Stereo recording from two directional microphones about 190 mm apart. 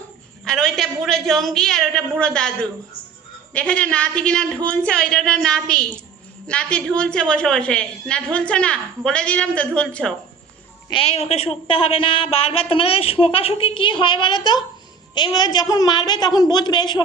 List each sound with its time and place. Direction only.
0.4 s a woman's voice: centre (ahead or behind)
10.8 s a man's voice: 30° left (ahead or behind)